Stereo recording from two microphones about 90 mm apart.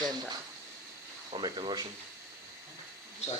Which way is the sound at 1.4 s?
55° right (ahead or behind).